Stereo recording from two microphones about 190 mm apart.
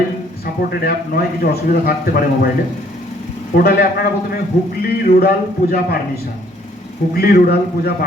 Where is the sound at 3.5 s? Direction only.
55° left (ahead or behind).